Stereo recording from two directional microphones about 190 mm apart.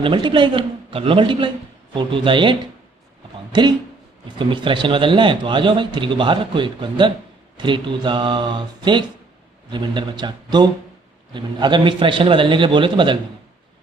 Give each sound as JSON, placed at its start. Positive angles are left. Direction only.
{"t": 0.0, "sound": "a man's voice", "side_deg": -25}